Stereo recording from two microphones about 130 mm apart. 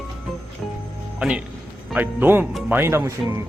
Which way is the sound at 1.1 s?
10° right (ahead or behind).